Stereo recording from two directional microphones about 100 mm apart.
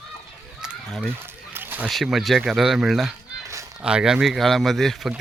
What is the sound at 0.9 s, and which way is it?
Speech, 5° left (ahead or behind).